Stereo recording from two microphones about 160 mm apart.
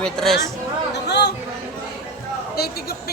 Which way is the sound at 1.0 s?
90° left.